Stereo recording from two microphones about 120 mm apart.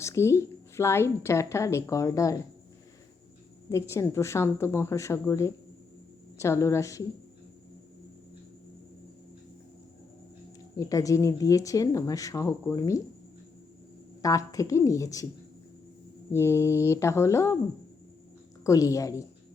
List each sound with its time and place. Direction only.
0.0 s speech: 25° left (ahead or behind)
3.7 s speech: 25° left (ahead or behind)
6.3 s speech: 25° left (ahead or behind)
10.8 s speech: 25° left (ahead or behind)
14.2 s speech: 30° left (ahead or behind)
16.3 s speech: 20° left (ahead or behind)
18.6 s speech: 25° left (ahead or behind)